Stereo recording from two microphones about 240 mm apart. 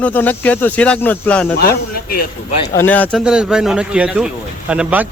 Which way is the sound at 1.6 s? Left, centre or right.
Left.